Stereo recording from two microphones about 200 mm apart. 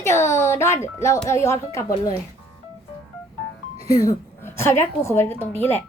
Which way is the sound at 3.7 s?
30° right (ahead or behind).